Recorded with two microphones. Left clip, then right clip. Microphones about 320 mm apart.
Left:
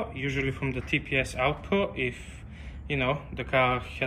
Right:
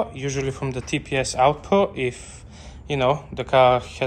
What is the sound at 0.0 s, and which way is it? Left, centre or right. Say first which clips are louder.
Speech: right 5 dB; centre.